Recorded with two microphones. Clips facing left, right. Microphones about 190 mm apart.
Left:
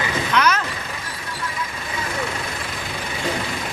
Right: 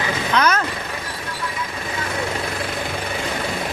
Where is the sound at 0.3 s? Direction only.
45° right (ahead or behind).